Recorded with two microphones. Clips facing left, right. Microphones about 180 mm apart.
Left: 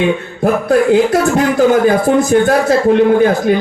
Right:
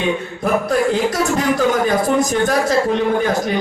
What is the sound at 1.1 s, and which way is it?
A man's voice, 60° left (ahead or behind).